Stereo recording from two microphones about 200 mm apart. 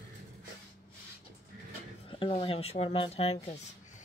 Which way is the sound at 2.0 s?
25° left (ahead or behind).